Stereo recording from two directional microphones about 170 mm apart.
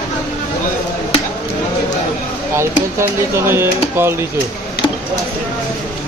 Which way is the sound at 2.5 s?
15° right (ahead or behind).